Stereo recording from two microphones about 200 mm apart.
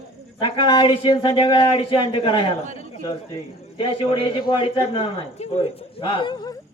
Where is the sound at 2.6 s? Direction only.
40° right (ahead or behind).